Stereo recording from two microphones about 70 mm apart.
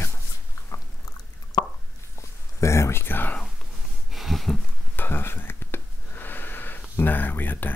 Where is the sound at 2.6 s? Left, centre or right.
Left.